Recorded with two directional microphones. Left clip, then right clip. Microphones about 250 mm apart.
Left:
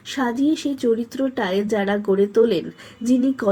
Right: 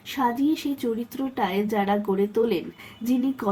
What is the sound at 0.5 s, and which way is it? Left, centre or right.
Speech, centre.